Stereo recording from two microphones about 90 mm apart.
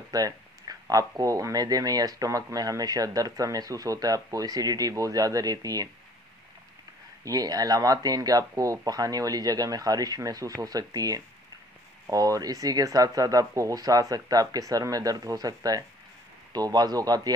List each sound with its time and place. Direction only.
0.1 s speech: 45° right (ahead or behind)
7.2 s speech: 45° right (ahead or behind)